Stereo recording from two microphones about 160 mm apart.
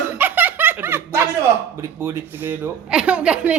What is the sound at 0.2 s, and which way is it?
Music, 10° right (ahead or behind).